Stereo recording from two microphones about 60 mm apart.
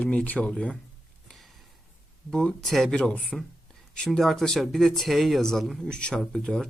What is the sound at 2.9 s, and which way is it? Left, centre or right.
Speech, centre.